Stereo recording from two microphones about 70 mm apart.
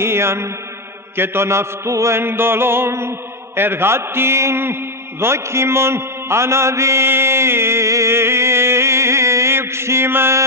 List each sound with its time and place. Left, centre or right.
0.0 s mantra: right